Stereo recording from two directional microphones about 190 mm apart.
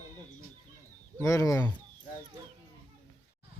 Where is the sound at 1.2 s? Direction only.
15° left (ahead or behind).